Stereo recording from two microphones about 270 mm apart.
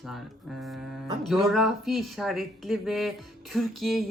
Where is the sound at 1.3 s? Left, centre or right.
Centre.